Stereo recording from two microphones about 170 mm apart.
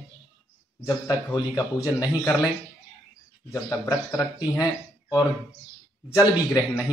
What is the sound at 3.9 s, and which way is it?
Speech, 20° left (ahead or behind).